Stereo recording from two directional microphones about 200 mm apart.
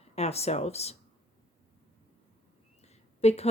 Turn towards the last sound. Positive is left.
turn(degrees=30)  # may be behind; listen again after turning